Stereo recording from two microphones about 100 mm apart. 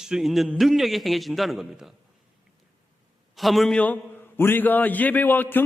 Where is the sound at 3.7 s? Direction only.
15° left (ahead or behind).